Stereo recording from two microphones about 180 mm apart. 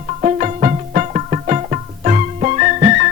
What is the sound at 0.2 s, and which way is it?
Music, 40° right (ahead or behind).